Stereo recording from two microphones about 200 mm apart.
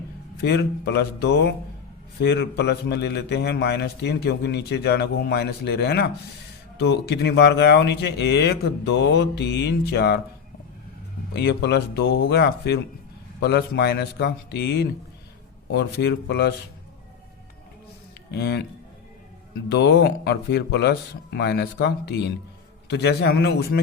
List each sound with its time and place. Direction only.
0.4 s a man's voice: 55° left (ahead or behind)
11.3 s a man's voice: 55° left (ahead or behind)
18.3 s a man's voice: 55° left (ahead or behind)
19.6 s a man's voice: 55° left (ahead or behind)